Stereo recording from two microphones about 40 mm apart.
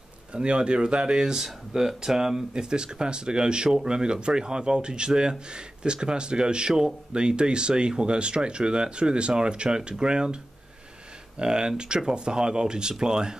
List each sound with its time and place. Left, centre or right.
0.3 s speech: right